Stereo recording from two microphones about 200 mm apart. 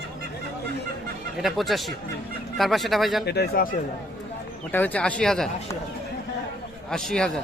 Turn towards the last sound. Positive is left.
turn(degrees=5)  # may be behind; listen again after turning